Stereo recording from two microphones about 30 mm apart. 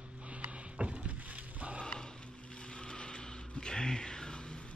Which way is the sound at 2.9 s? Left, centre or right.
Left.